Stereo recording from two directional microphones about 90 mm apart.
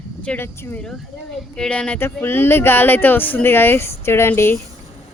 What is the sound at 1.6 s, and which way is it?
Speech, 10° left (ahead or behind).